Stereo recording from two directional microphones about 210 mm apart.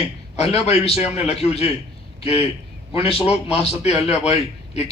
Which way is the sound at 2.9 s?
25° left (ahead or behind).